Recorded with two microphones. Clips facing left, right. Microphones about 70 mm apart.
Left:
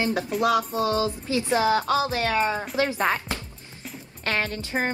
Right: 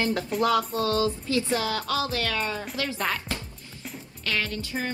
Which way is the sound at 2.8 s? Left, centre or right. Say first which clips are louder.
Left 6 dB; left.